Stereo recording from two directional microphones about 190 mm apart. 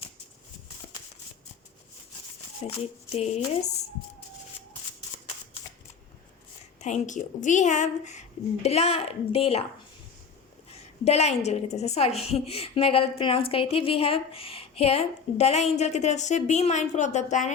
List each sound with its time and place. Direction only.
2.6 s a woman's voice: 35° left (ahead or behind)
6.7 s a woman's voice: 40° left (ahead or behind)
11.0 s a woman's voice: 35° left (ahead or behind)